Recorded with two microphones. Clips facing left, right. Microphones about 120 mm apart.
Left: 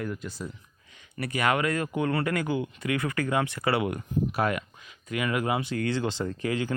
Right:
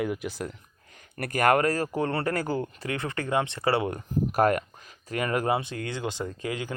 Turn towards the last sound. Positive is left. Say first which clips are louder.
# left 4 dB
turn(degrees=-15)  # may be behind; listen again after turning